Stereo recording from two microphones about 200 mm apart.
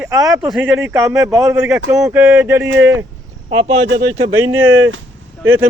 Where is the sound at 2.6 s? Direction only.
65° right (ahead or behind).